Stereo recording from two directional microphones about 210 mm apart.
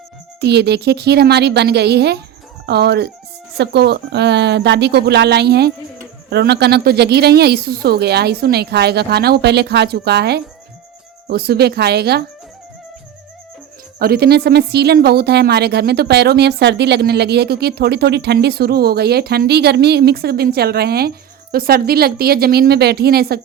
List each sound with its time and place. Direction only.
0.3 s a woman's voice: 50° right (ahead or behind)
14.0 s a woman's voice: 50° right (ahead or behind)